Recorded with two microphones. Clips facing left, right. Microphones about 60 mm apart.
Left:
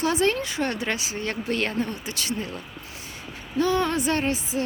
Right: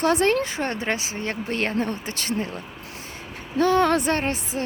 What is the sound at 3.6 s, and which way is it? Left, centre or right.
Speech, right.